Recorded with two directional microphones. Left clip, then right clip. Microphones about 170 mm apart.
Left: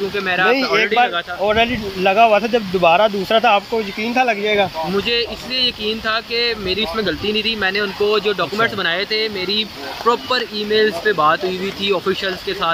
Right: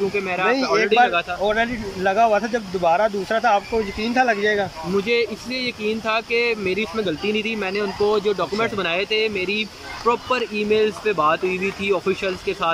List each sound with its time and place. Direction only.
0.1 s speech: 10° right (ahead or behind)
0.5 s speech: centre (ahead or behind)
5.0 s speech: 15° right (ahead or behind)